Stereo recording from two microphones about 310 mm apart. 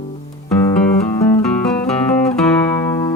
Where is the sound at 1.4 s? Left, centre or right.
Centre.